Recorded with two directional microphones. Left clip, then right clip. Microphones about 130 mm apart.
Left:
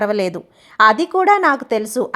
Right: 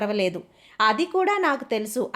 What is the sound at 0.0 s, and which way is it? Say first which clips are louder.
A woman's voice: left 6 dB; 40° left (ahead or behind).